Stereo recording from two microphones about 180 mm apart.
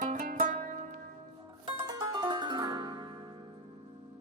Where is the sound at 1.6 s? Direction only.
25° right (ahead or behind).